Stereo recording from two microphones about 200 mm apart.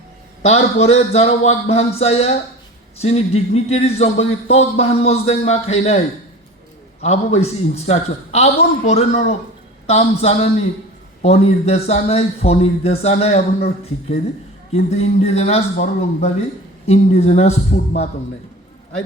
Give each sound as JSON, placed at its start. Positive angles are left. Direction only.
{"t": 0.4, "sound": "speech", "side_deg": 30}
{"t": 7.0, "sound": "speech", "side_deg": 35}
{"t": 14.8, "sound": "speech", "side_deg": 30}